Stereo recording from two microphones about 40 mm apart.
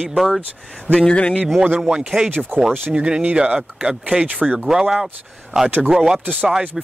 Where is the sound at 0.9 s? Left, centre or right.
Left.